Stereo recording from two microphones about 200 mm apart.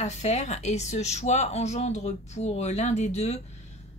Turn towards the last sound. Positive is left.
turn(degrees=35)  # may be behind; listen again after turning